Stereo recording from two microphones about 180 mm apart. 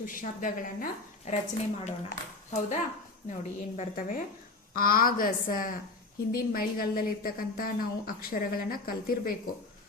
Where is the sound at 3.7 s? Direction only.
40° left (ahead or behind).